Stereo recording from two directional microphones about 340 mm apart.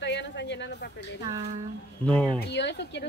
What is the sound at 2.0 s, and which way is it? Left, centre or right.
Speech, centre.